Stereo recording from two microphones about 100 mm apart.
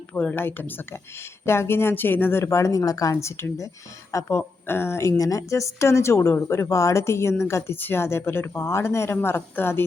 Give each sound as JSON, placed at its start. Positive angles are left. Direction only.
{"t": 0.1, "sound": "a woman's voice", "side_deg": 15}